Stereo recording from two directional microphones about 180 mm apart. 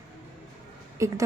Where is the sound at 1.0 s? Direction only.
15° right (ahead or behind).